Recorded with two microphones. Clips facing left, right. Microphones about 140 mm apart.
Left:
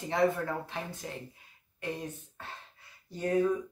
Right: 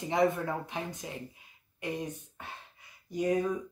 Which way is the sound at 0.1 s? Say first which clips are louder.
Even; 20° right (ahead or behind).